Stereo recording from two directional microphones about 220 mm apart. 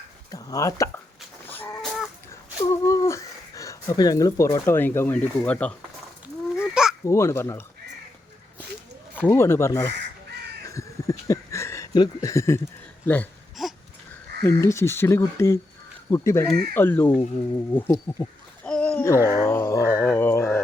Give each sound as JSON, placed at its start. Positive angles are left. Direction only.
{"t": 0.3, "sound": "speech", "side_deg": 15}
{"t": 1.5, "sound": "chicken", "side_deg": 10}
{"t": 2.8, "sound": "speech", "side_deg": 15}
{"t": 6.6, "sound": "a sound", "side_deg": -5}
{"t": 7.0, "sound": "speech", "side_deg": 10}
{"t": 9.2, "sound": "speech", "side_deg": 10}
{"t": 10.7, "sound": "a sound", "side_deg": 15}
{"t": 14.4, "sound": "speech", "side_deg": 10}
{"t": 20.0, "sound": "a sound", "side_deg": 10}